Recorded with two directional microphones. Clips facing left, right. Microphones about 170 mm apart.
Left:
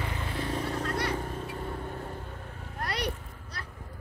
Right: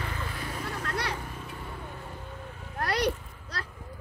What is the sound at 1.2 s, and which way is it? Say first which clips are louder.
Vehicle: left 5 dB; 50° left (ahead or behind).